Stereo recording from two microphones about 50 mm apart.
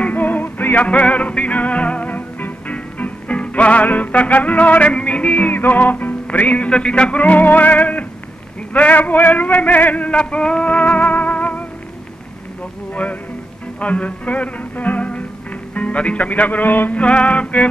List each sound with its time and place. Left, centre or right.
0.0 s music: left
5.5 s music: left
8.7 s male singing: left
12.9 s a man's voice: left
13.7 s music: left
15.7 s speech: left
16.9 s music: left